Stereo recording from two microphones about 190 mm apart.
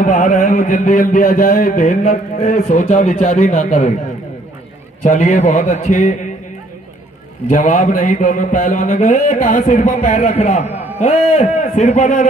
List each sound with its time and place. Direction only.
0.0 s a sound: 40° left (ahead or behind)
5.0 s a man's voice: 40° left (ahead or behind)
7.4 s a man's voice: 40° left (ahead or behind)